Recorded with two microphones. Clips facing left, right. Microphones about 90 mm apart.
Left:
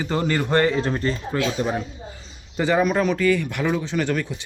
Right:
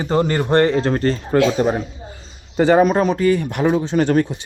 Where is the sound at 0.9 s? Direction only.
60° right (ahead or behind).